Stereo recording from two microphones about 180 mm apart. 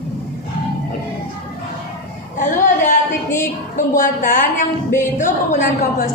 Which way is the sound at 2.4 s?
45° left (ahead or behind).